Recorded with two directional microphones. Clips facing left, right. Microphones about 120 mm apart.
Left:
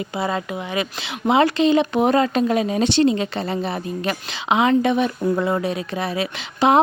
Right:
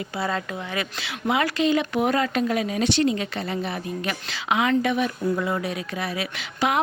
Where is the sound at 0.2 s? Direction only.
15° left (ahead or behind).